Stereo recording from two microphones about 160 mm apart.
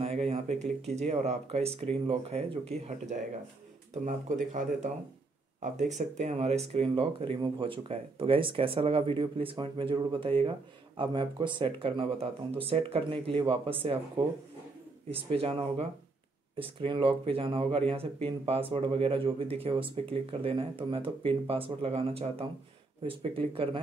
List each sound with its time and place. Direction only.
0.3 s speech: 45° right (ahead or behind)
15.0 s speech: 35° right (ahead or behind)